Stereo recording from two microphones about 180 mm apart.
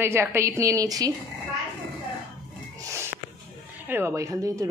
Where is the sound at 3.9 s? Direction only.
15° right (ahead or behind).